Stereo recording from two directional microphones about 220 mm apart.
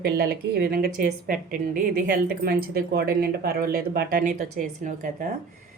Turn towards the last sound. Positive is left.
turn(degrees=-35)  # may be behind; listen again after turning